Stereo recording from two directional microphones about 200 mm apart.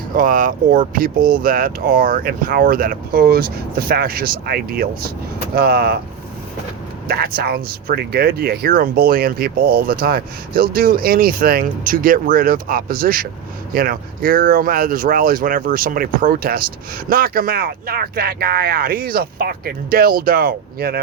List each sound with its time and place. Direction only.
0.1 s speech: 40° right (ahead or behind)
7.3 s speech: 50° right (ahead or behind)